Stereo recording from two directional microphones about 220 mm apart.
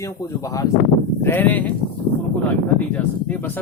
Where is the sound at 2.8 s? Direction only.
10° left (ahead or behind).